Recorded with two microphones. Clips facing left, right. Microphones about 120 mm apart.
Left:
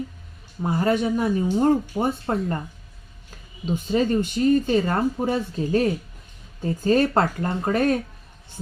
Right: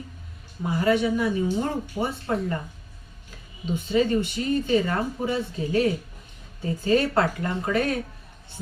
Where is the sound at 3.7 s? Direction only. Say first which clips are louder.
Left 1 dB; 40° left (ahead or behind).